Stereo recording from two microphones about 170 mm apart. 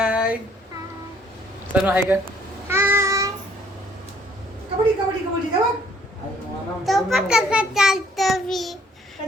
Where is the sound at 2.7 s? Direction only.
15° right (ahead or behind).